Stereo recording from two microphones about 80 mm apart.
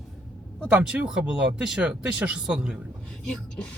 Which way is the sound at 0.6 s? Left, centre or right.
Centre.